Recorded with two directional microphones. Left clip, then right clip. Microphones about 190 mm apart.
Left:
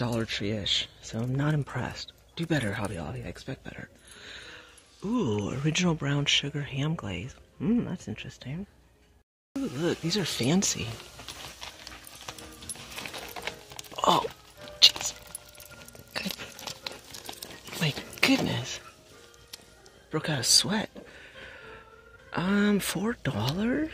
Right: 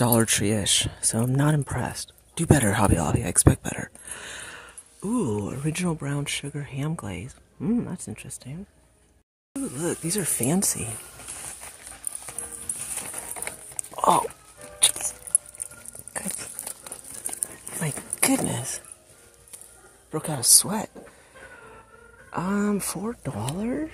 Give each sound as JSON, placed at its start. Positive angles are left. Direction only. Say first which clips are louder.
{"t": 0.0, "sound": "speech", "louder": "right 8 dB", "side_deg": -35}
{"t": 2.3, "sound": "speech", "louder": "right 8 dB", "side_deg": -30}
{"t": 5.0, "sound": "speech", "louder": "right 2 dB", "side_deg": -15}
{"t": 13.9, "sound": "a sound", "louder": "right 4 dB", "side_deg": -5}
{"t": 14.8, "sound": "music", "louder": "left 6 dB", "side_deg": -5}
{"t": 17.7, "sound": "a sound", "louder": "left 3 dB", "side_deg": -5}
{"t": 20.1, "sound": "speech", "louder": "right 1 dB", "side_deg": -5}
{"t": 22.3, "sound": "speech", "louder": "even", "side_deg": -5}
{"t": 23.0, "sound": "speech", "louder": "left 1 dB", "side_deg": 5}